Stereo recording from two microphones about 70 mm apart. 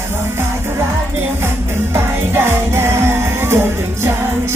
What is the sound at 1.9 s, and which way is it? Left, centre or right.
Music, right.